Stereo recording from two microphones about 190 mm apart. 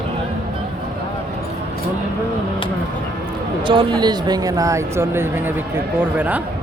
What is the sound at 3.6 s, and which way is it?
A man's voice, 25° right (ahead or behind).